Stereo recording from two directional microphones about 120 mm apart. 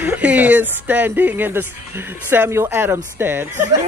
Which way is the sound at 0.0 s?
15° right (ahead or behind).